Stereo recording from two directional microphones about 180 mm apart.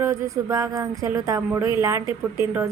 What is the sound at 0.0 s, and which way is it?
A woman's voice, 15° right (ahead or behind).